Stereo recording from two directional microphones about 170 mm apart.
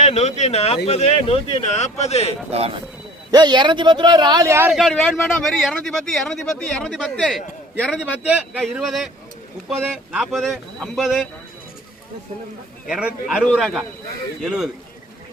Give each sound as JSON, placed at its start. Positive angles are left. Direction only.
{"t": 0.0, "sound": "speech", "side_deg": 40}
{"t": 2.5, "sound": "speech", "side_deg": -35}
{"t": 3.3, "sound": "speech", "side_deg": -25}
{"t": 4.7, "sound": "speech", "side_deg": 0}
{"t": 9.7, "sound": "speech", "side_deg": -10}
{"t": 12.9, "sound": "speech", "side_deg": -5}